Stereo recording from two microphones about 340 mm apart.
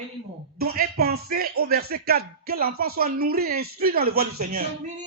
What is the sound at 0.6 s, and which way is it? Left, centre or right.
Speech, right.